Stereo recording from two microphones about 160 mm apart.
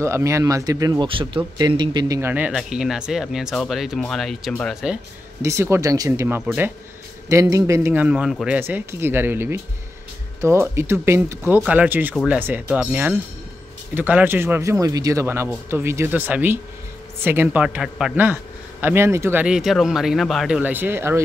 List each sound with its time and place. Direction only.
0.0 s speech: 20° right (ahead or behind)
1.0 s speech: 35° right (ahead or behind)
2.1 s a man's voice: 15° right (ahead or behind); by 4.7 s 5° left (ahead or behind)
5.4 s a man's voice: 15° right (ahead or behind)
19.4 s speech: 5° right (ahead or behind)